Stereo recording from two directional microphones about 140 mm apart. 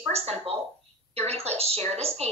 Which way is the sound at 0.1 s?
50° right (ahead or behind).